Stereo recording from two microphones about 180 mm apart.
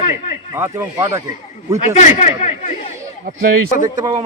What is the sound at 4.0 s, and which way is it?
Speech, 20° right (ahead or behind).